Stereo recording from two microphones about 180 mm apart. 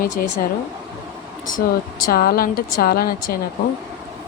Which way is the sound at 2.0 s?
55° left (ahead or behind).